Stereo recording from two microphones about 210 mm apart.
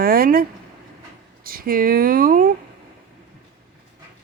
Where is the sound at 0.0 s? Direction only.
45° right (ahead or behind).